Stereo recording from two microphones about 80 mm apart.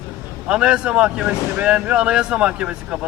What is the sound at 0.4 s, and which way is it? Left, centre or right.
Speech, centre.